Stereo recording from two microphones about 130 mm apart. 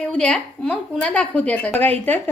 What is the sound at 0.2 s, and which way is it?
A woman's voice, 10° left (ahead or behind).